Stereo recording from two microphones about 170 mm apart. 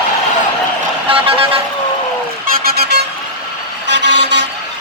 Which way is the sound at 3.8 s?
90° right.